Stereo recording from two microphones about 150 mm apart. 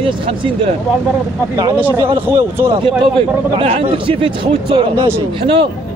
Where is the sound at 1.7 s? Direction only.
10° right (ahead or behind).